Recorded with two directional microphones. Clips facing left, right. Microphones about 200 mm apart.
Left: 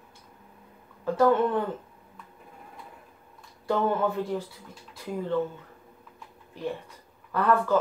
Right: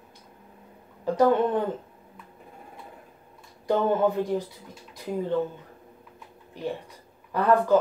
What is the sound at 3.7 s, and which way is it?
Speech, 20° right (ahead or behind).